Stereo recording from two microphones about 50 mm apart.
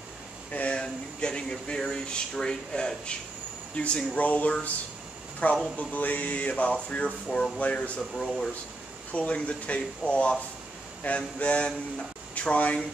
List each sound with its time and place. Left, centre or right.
0.5 s speech: left
9.1 s speech: left